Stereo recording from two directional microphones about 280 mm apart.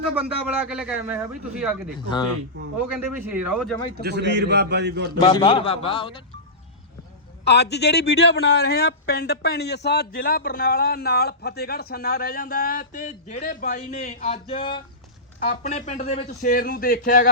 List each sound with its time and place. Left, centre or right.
0.2 s a man's voice: centre
3.3 s a man's voice: centre
4.0 s a man's voice: right
5.2 s a man's voice: centre
7.4 s a man's voice: left